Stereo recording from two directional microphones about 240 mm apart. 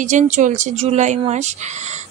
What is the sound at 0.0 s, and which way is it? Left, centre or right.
A woman's voice, right.